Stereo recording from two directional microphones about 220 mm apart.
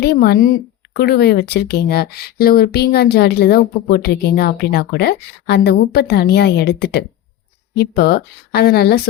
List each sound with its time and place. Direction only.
0.0 s a woman's voice: 45° left (ahead or behind)